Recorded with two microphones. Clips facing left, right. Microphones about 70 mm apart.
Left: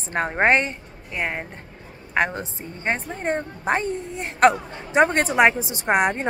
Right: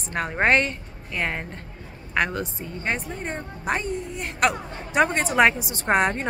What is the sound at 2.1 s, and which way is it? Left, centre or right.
A woman's voice, left.